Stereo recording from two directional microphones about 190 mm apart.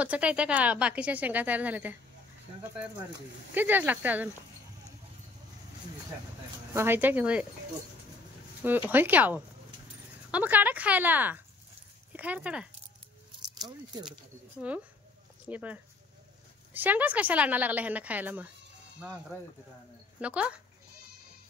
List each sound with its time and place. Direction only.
0.0 s a woman's voice: 5° right (ahead or behind)
3.5 s a woman's voice: 10° right (ahead or behind)
6.7 s a woman's voice: 10° right (ahead or behind)
8.6 s a woman's voice: 10° right (ahead or behind)
13.6 s speech: 20° right (ahead or behind)
15.4 s a woman's voice: 10° right (ahead or behind)
20.2 s a woman's voice: 5° right (ahead or behind)